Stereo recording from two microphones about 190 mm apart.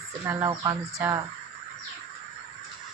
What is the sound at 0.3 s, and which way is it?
Speech, 15° right (ahead or behind).